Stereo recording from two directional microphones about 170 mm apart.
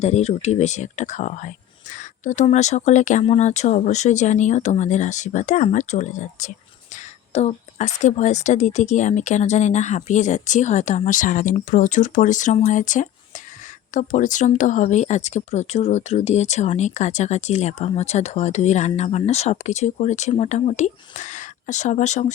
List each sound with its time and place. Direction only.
0.0 s a woman's voice: 40° left (ahead or behind)